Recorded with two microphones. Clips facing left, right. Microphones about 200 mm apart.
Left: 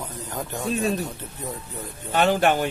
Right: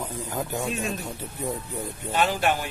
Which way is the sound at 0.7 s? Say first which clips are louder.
Left 6 dB; 35° left (ahead or behind).